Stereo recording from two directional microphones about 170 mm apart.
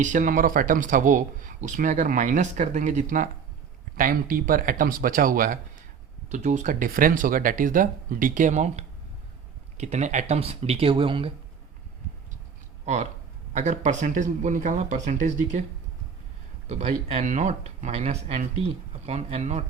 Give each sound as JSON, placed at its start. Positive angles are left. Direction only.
{"t": 0.0, "sound": "speech", "side_deg": -50}
{"t": 6.2, "sound": "speech", "side_deg": -45}
{"t": 12.8, "sound": "speech", "side_deg": -45}
{"t": 16.6, "sound": "speech", "side_deg": -40}